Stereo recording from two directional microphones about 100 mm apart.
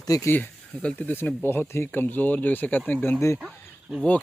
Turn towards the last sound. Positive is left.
turn(degrees=-5)  # may be behind; listen again after turning